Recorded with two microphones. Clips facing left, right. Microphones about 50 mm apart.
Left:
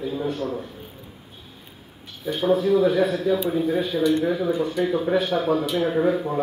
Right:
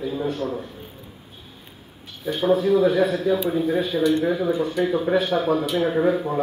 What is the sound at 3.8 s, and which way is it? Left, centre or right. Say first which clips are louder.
A man's voice: right 1 dB; right.